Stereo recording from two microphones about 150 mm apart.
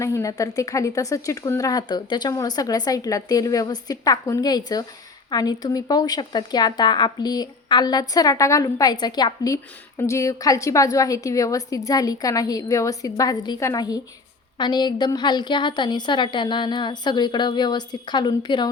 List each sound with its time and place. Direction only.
0.0 s speech: 20° left (ahead or behind)